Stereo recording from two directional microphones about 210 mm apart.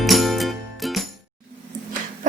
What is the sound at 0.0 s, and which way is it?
Music, centre (ahead or behind).